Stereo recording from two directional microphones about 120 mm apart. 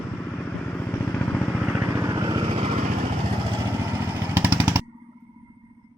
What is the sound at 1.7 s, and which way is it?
Vehicle, 20° right (ahead or behind).